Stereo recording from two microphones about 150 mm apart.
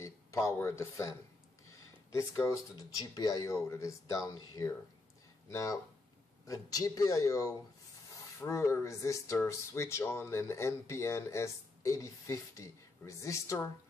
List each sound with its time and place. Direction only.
0.0 s speech: 20° left (ahead or behind)
2.1 s speech: 20° left (ahead or behind)